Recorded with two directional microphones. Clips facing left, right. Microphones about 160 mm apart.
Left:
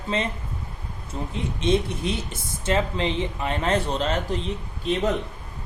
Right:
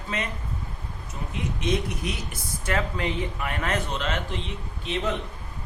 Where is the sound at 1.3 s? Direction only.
30° left (ahead or behind).